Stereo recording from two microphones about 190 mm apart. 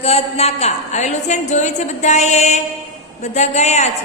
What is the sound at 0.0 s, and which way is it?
A woman's voice, 35° left (ahead or behind).